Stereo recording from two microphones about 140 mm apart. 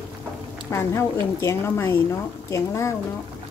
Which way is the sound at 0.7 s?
20° left (ahead or behind).